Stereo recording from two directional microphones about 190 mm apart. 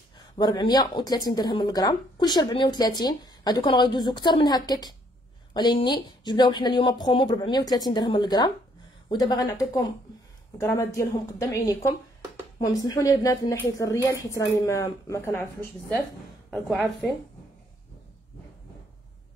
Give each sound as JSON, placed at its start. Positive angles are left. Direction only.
{"t": 0.4, "sound": "a woman's voice", "side_deg": 20}
{"t": 16.4, "sound": "a woman's voice", "side_deg": 0}